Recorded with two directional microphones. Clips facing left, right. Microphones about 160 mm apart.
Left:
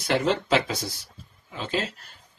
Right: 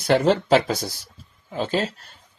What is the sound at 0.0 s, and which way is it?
Speech, 40° right (ahead or behind).